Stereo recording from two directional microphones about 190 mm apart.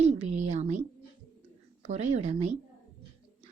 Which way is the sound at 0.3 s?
35° right (ahead or behind).